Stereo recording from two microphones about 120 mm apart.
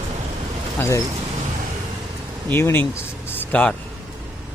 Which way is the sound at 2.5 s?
20° left (ahead or behind).